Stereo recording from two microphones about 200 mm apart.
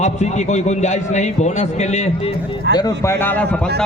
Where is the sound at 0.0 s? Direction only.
35° left (ahead or behind).